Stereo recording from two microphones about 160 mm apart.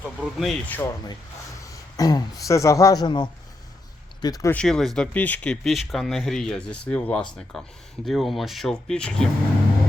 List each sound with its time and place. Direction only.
0.2 s speech: centre (ahead or behind)
0.7 s a man's voice: 15° left (ahead or behind)
4.5 s speech: 5° left (ahead or behind)